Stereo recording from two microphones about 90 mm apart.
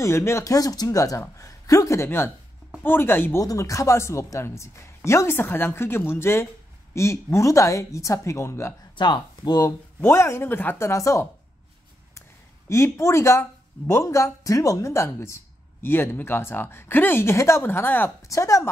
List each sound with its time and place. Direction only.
0.0 s a woman's voice: 30° left (ahead or behind)
2.0 s speech: 25° left (ahead or behind)
3.3 s a woman's voice: 40° left (ahead or behind)
8.9 s speech: 60° left (ahead or behind)
10.0 s speech: 30° left (ahead or behind)
18.2 s a woman's voice: 35° left (ahead or behind)